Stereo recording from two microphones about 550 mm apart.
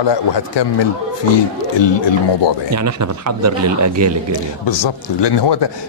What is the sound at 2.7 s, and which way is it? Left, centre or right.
Speech, right.